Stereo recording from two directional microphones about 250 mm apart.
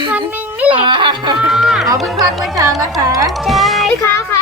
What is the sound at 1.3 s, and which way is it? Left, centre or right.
Speech, centre.